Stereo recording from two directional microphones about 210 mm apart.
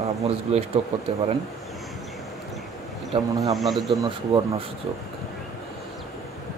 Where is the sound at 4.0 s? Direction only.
20° right (ahead or behind).